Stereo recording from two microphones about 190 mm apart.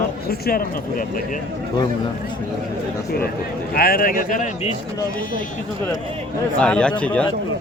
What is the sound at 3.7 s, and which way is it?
Speech, 55° left (ahead or behind).